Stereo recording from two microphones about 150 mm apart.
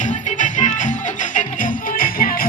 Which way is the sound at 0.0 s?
55° left (ahead or behind).